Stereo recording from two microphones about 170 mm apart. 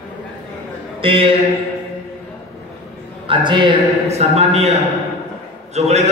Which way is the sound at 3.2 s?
25° right (ahead or behind).